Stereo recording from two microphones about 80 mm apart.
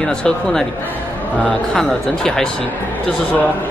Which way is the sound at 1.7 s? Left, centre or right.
Centre.